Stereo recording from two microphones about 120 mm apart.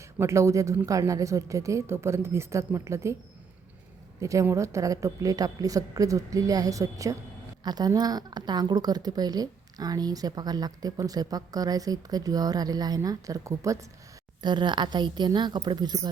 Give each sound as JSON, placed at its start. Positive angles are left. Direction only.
{"t": 0.2, "sound": "a woman's voice", "side_deg": -25}
{"t": 4.2, "sound": "a woman's voice", "side_deg": -25}
{"t": 14.4, "sound": "a woman's voice", "side_deg": -40}